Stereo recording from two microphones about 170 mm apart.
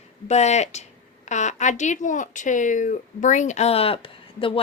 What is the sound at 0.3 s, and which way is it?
Speech, 40° left (ahead or behind).